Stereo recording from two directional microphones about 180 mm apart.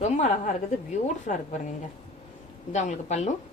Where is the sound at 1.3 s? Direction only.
50° left (ahead or behind).